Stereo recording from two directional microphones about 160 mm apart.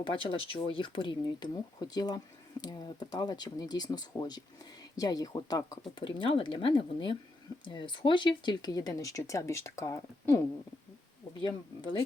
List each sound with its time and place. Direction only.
0.1 s speech: 35° left (ahead or behind)
6.0 s speech: 35° left (ahead or behind)
11.4 s speech: 35° left (ahead or behind)